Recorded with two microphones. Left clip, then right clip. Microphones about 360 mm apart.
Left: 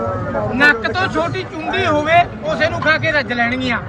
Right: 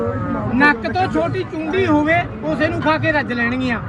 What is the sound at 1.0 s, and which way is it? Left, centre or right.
Speech, centre.